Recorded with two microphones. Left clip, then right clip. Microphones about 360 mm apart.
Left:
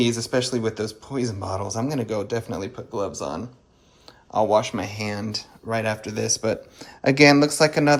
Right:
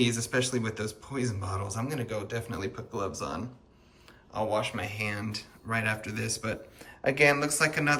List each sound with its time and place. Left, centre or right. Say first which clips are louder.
0.0 s speech: left 6 dB; centre